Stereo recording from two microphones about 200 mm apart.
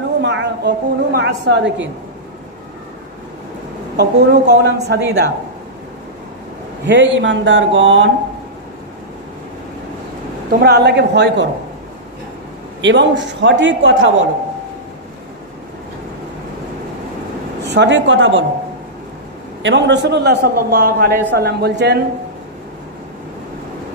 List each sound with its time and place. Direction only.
0.2 s a woman's voice: 60° right (ahead or behind)
3.9 s a woman's voice: 55° right (ahead or behind)
6.9 s speech: 65° right (ahead or behind)
10.5 s a woman's voice: 55° right (ahead or behind)
12.8 s a woman's voice: 65° right (ahead or behind)
17.6 s speech: 60° right (ahead or behind)
19.6 s a woman's voice: 65° right (ahead or behind)